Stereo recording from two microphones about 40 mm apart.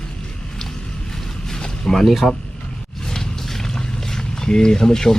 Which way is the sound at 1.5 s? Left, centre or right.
Centre.